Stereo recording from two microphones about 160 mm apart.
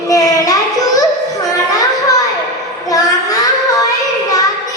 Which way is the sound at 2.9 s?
20° left (ahead or behind).